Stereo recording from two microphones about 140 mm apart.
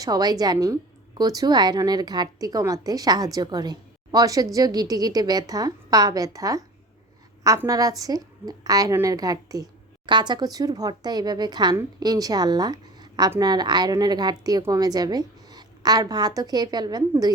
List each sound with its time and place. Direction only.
0.0 s a woman's voice: 25° right (ahead or behind)